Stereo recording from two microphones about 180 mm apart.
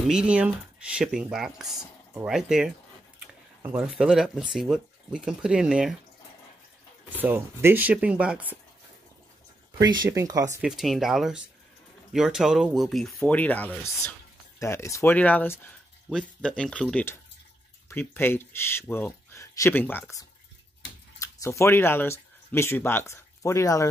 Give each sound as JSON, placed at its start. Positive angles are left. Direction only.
{"t": 0.1, "sound": "speech", "side_deg": -5}
{"t": 7.1, "sound": "speech", "side_deg": -10}
{"t": 9.8, "sound": "speech", "side_deg": -20}
{"t": 10.6, "sound": "speech", "side_deg": 0}